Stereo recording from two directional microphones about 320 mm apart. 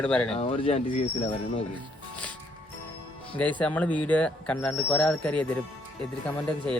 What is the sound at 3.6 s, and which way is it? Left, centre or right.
Speech, centre.